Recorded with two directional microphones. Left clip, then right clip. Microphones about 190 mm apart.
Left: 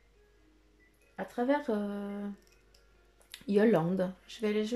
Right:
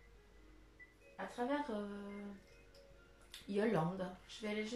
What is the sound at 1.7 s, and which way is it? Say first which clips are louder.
Speech: left 11 dB; 50° left (ahead or behind).